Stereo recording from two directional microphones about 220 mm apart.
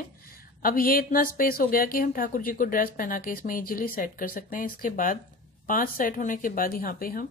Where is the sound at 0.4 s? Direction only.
40° left (ahead or behind).